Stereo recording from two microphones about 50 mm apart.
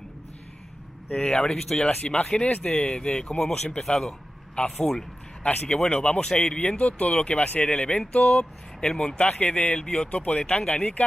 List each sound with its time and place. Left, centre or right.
1.1 s speech: centre
1.8 s speech: left
5.4 s speech: left
5.9 s speech: centre
6.7 s speech: left
8.8 s speech: centre
9.2 s speech: left
10.4 s speech: centre